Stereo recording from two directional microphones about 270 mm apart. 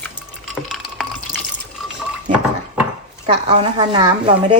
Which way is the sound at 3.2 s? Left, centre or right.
Right.